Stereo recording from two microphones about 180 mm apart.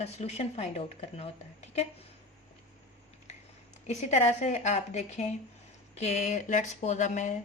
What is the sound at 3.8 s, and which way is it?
A woman's voice, 35° left (ahead or behind).